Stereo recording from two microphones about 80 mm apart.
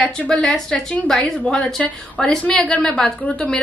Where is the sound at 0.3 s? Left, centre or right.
Centre.